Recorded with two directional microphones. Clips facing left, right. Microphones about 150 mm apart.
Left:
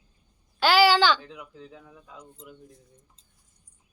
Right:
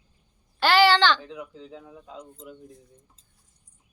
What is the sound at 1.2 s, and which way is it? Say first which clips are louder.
Speech: right 4 dB; 20° right (ahead or behind).